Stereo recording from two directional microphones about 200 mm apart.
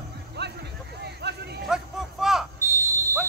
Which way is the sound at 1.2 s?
55° right (ahead or behind).